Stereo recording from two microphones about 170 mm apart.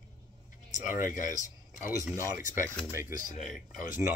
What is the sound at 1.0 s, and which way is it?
Speech, 50° left (ahead or behind).